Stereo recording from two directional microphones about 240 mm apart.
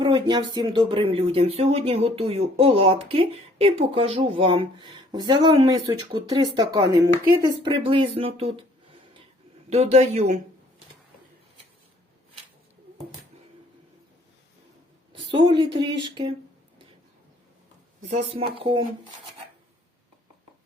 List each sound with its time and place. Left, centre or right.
0.0 s speech: centre
9.6 s speech: right
15.1 s speech: right
18.1 s speech: right